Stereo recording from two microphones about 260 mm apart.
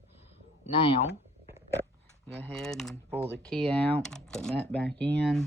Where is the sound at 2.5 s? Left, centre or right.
Centre.